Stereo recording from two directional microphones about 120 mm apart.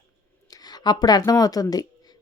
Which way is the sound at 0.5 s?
35° left (ahead or behind).